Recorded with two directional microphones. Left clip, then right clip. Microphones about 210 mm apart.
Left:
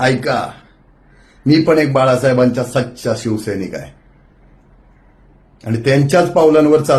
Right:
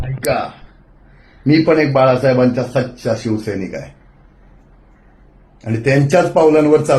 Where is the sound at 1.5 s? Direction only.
15° left (ahead or behind).